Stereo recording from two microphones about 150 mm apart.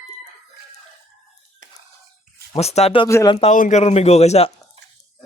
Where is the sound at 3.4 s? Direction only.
55° left (ahead or behind).